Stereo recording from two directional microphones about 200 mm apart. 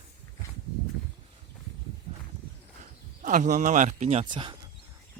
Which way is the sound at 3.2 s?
40° right (ahead or behind).